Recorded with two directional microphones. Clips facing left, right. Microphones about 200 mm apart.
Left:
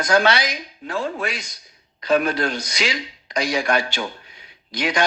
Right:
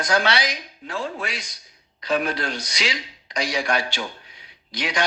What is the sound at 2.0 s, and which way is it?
A man's voice, 50° left (ahead or behind).